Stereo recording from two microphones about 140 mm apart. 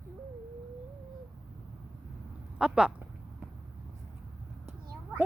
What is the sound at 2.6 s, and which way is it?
Speech, 5° right (ahead or behind).